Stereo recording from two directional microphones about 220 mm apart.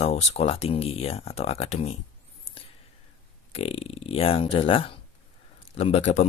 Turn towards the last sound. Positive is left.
turn(degrees=30)  # may be behind; listen again after turning